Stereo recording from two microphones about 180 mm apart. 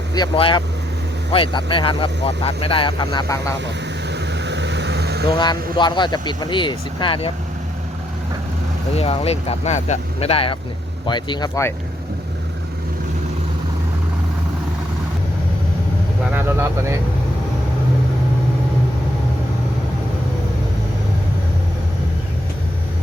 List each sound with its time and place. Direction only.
0.1 s speech: 25° left (ahead or behind)
4.1 s vehicle: 75° right (ahead or behind)
5.7 s speech: 25° left (ahead or behind)
9.0 s speech: 35° left (ahead or behind); by 11.7 s 20° left (ahead or behind)
16.3 s speech: 15° right (ahead or behind)